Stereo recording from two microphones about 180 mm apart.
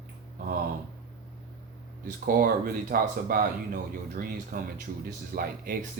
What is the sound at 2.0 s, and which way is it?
Speech, 50° right (ahead or behind).